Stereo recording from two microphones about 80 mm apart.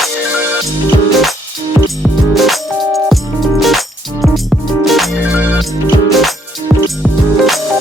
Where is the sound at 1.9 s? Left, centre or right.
Centre.